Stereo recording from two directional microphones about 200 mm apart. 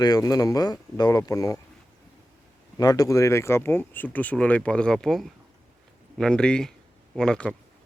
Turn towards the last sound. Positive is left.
turn(degrees=5)  # may be behind; listen again after turning